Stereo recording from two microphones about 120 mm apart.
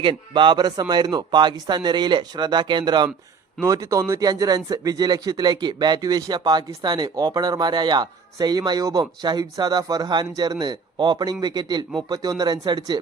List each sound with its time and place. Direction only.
0.0 s speech: 40° right (ahead or behind)
3.7 s speech: 25° right (ahead or behind)